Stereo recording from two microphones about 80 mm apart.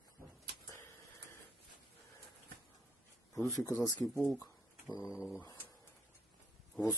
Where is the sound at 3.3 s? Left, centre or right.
Left.